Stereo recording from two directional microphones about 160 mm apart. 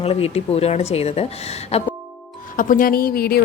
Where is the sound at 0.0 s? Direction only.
40° left (ahead or behind).